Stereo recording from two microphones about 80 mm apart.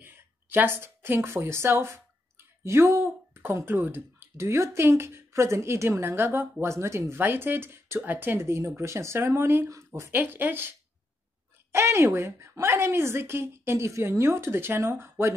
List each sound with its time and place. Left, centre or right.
0.0 s speech: right
11.7 s speech: right